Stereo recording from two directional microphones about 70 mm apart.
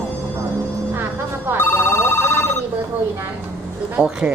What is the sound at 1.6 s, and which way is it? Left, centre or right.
Telephone, left.